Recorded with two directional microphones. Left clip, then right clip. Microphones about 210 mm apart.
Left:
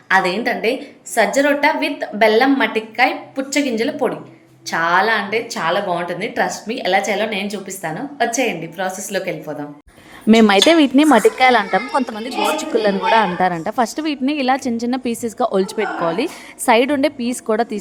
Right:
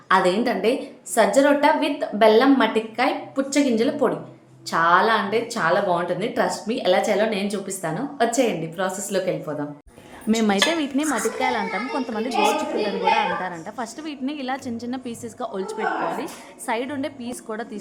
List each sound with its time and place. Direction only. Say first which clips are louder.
0.1 s a woman's voice: left 3 dB; 10° right (ahead or behind)
10.2 s a woman's voice: left 9 dB; 40° left (ahead or behind)
13.1 s a woman's voice: left 8 dB; 40° left (ahead or behind)